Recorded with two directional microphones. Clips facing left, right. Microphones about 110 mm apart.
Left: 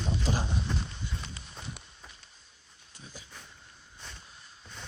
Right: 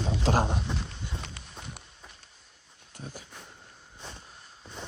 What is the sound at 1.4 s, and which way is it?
Walk, 60° right (ahead or behind).